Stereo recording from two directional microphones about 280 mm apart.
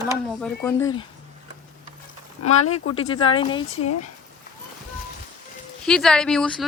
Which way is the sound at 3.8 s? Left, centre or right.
Left.